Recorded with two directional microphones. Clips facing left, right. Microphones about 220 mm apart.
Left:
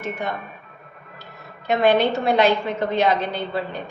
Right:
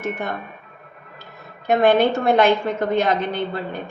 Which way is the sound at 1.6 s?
50° right (ahead or behind).